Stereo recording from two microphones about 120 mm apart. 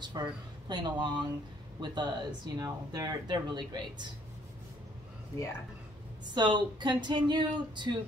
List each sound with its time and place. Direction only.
0.0 s speech: 40° right (ahead or behind)
6.3 s speech: 40° right (ahead or behind)